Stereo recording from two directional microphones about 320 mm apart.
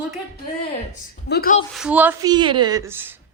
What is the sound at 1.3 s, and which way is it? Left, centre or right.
Speech, left.